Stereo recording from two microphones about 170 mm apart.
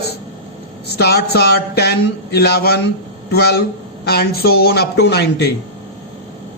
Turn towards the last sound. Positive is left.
turn(degrees=75)  # may be behind; listen again after turning